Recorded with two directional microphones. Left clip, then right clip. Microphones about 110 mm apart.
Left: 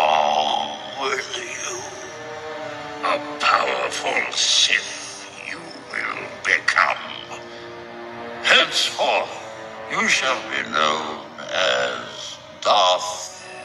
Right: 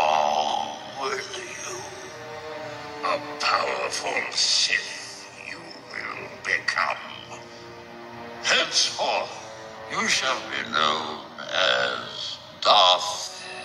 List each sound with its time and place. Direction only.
0.0 s a sound: 30° left (ahead or behind)
2.6 s speech: 40° left (ahead or behind)
5.5 s music: 50° left (ahead or behind)
8.4 s music: 55° left (ahead or behind); by 13.3 s 25° left (ahead or behind)